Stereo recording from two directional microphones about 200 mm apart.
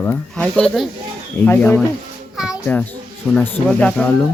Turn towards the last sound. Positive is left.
turn(degrees=5)  # may be behind; listen again after turning